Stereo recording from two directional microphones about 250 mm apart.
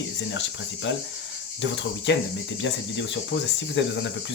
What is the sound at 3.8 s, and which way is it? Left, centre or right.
Speech, left.